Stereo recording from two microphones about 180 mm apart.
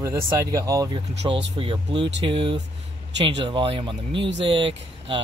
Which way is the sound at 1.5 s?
30° right (ahead or behind).